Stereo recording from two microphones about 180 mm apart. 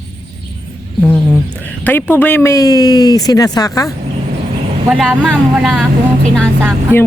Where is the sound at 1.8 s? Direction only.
10° left (ahead or behind).